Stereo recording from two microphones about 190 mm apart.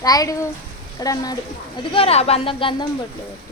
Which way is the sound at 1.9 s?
30° left (ahead or behind).